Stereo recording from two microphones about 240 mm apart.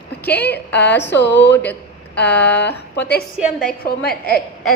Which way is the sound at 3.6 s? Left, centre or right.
Left.